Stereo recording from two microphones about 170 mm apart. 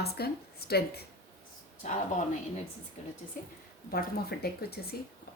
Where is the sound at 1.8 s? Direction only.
45° left (ahead or behind).